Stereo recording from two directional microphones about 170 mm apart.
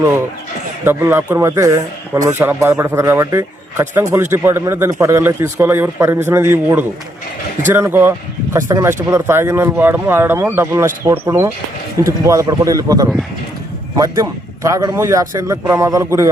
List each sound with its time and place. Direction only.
0.9 s a man's voice: 15° right (ahead or behind)